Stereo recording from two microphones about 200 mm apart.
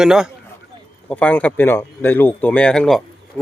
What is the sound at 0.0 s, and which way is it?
Speech, 5° right (ahead or behind).